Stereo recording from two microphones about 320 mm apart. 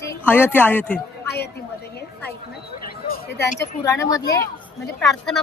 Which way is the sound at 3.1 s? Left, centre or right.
Left.